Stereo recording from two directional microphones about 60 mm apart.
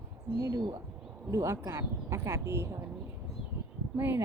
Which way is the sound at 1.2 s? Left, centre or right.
Right.